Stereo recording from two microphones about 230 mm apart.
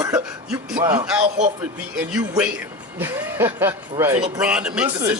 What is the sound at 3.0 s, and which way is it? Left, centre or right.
Speech, centre.